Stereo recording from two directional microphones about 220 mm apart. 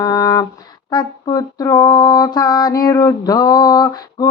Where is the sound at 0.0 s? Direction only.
15° left (ahead or behind).